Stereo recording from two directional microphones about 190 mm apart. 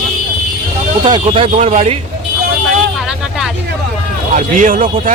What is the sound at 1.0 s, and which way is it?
Speech, 25° right (ahead or behind).